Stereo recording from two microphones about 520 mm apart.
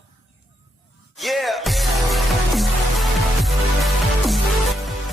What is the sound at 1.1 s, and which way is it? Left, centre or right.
Music, centre.